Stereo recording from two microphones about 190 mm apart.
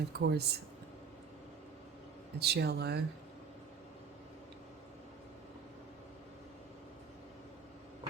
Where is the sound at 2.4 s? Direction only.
60° right (ahead or behind).